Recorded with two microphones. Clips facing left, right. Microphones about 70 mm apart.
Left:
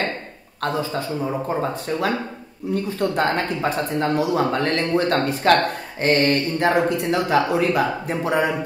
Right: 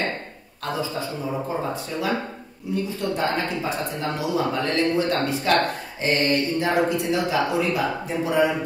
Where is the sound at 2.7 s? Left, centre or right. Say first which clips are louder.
Left 4 dB; left.